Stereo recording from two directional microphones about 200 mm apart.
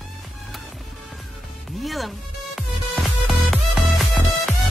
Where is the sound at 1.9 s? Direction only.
Centre (ahead or behind).